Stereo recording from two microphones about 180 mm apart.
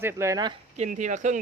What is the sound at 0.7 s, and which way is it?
Speech, 45° right (ahead or behind).